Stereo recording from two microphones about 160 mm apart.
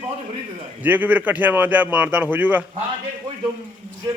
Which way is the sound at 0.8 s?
10° right (ahead or behind).